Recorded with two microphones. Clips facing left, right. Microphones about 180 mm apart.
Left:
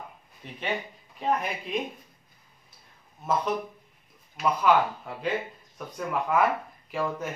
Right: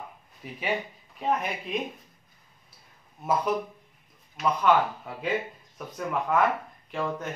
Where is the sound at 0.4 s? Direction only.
5° right (ahead or behind).